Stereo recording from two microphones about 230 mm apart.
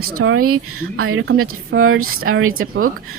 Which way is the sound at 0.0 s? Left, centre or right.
Right.